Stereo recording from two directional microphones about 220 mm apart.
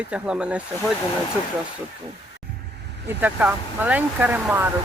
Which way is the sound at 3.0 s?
10° right (ahead or behind).